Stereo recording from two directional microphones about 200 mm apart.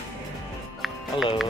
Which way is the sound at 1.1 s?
25° left (ahead or behind).